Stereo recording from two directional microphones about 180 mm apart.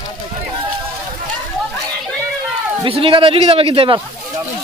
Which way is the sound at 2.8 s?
30° right (ahead or behind).